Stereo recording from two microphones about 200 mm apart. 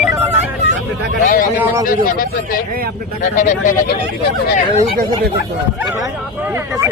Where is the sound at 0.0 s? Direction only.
10° right (ahead or behind).